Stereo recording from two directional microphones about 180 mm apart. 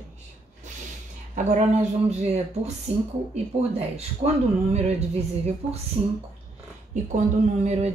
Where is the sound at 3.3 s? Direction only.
35° right (ahead or behind).